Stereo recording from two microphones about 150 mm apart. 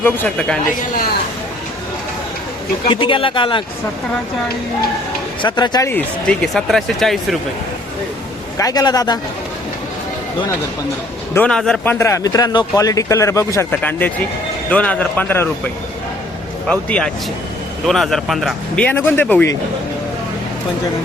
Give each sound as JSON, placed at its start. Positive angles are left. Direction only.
{"t": 0.0, "sound": "speech", "side_deg": 5}
{"t": 2.9, "sound": "speech", "side_deg": 35}
{"t": 5.4, "sound": "speech", "side_deg": 30}
{"t": 5.9, "sound": "speech", "side_deg": 5}
{"t": 8.5, "sound": "speech", "side_deg": 25}
{"t": 11.3, "sound": "speech", "side_deg": 5}
{"t": 11.9, "sound": "speech", "side_deg": 20}
{"t": 16.6, "sound": "speech", "side_deg": 5}
{"t": 18.9, "sound": "speech", "side_deg": 10}